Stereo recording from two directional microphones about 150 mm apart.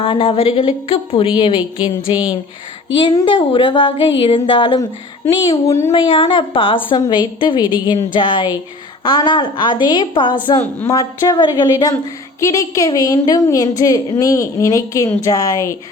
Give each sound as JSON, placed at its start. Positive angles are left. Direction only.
{"t": 0.0, "sound": "speech", "side_deg": 40}
{"t": 5.9, "sound": "speech", "side_deg": 35}
{"t": 10.8, "sound": "a woman's voice", "side_deg": 20}